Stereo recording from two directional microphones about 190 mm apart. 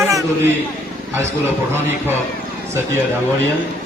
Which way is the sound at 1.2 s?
15° right (ahead or behind).